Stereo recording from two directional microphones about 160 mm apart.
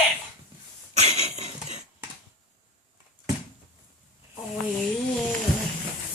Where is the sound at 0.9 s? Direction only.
45° right (ahead or behind).